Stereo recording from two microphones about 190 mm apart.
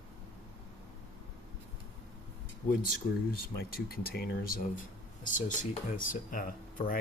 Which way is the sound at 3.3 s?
50° left (ahead or behind).